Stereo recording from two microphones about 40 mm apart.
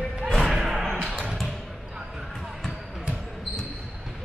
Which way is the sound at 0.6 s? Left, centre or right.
Centre.